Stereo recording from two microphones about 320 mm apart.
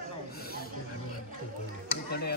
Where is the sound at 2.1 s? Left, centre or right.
Left.